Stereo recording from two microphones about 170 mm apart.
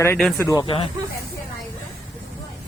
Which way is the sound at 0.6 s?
30° left (ahead or behind).